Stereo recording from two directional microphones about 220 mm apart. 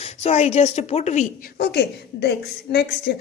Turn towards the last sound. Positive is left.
turn(degrees=45)  # may be behind; listen again after turning